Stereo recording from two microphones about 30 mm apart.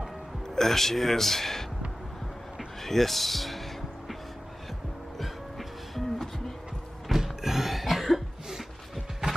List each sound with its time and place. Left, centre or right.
0.6 s a man's voice: centre
2.8 s music: centre
5.2 s music: centre
7.1 s cough: centre